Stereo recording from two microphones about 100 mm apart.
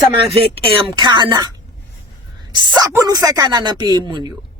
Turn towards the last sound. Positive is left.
turn(degrees=-45)  # may be behind; listen again after turning